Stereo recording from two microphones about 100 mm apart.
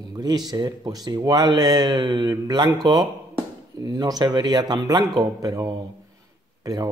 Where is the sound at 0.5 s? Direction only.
40° right (ahead or behind).